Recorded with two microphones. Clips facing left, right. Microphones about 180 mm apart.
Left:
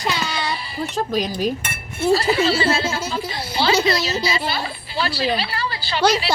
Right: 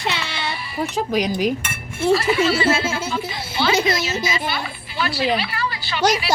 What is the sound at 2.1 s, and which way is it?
A woman's voice, 30° left (ahead or behind).